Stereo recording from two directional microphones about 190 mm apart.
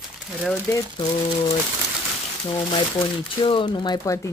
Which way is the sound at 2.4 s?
25° left (ahead or behind).